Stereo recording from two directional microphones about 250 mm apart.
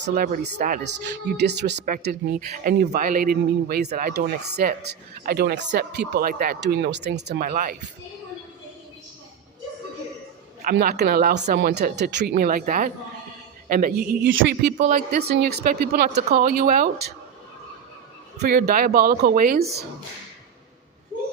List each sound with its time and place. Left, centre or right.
0.0 s speech: right
10.6 s speech: right
14.8 s speech: right
18.3 s speech: right